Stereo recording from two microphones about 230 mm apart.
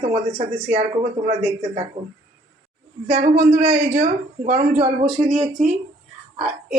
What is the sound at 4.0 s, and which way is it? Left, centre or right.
Speech, right.